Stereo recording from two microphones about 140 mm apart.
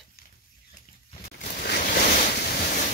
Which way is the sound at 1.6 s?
90° left.